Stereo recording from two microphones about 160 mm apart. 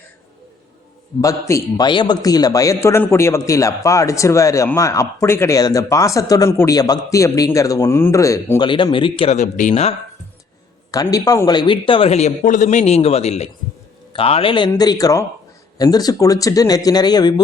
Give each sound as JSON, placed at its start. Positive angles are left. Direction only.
{"t": 1.2, "sound": "a man's voice", "side_deg": 20}
{"t": 10.9, "sound": "speech", "side_deg": 25}
{"t": 12.4, "sound": "a man's voice", "side_deg": 55}